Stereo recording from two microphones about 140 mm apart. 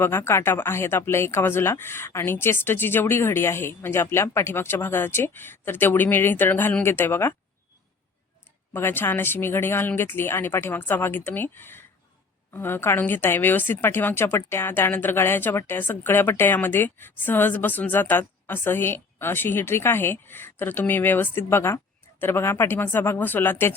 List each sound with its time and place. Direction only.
0.0 s a woman's voice: 15° left (ahead or behind)
8.7 s a woman's voice: 15° left (ahead or behind)